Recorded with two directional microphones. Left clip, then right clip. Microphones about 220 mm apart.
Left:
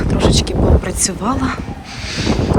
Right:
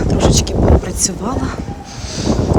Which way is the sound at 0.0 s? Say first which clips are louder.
Right 1 dB; 10° right (ahead or behind).